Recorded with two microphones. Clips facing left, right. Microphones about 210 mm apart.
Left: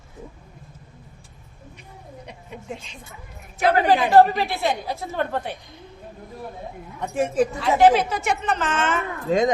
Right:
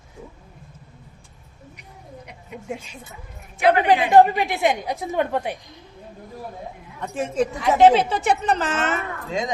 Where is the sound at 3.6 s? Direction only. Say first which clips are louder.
Right 1 dB; 40° left (ahead or behind).